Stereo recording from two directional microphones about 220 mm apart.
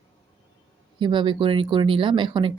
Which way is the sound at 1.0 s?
20° right (ahead or behind).